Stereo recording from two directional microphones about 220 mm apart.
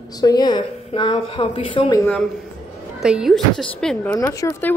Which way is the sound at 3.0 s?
5° right (ahead or behind).